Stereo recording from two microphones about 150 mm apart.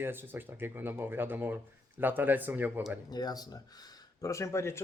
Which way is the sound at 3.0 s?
25° left (ahead or behind).